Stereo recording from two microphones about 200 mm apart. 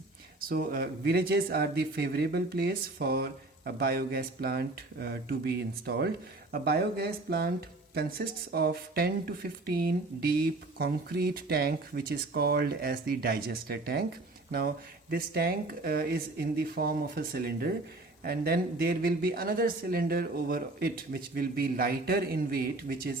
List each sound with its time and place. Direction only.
0.4 s speech: 50° right (ahead or behind)
15.1 s speech: 50° right (ahead or behind)